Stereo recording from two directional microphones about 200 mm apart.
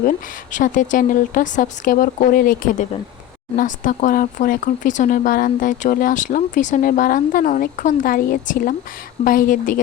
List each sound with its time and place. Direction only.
0.5 s speech: 40° left (ahead or behind)